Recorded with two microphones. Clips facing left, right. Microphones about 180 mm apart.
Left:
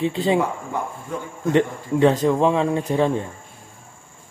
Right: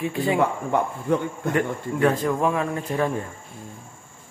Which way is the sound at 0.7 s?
65° right (ahead or behind).